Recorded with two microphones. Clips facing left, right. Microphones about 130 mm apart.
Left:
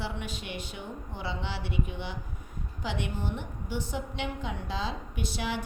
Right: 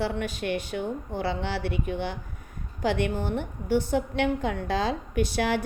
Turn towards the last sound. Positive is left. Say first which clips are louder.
# right 8 dB
turn(degrees=-70)  # may be behind; listen again after turning